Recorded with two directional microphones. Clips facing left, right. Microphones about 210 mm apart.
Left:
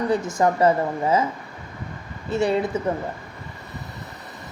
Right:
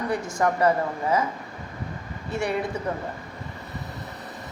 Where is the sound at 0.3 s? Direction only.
20° left (ahead or behind).